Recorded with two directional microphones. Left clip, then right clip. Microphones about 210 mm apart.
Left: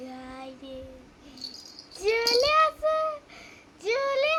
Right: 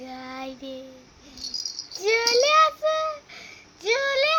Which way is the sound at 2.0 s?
5° right (ahead or behind).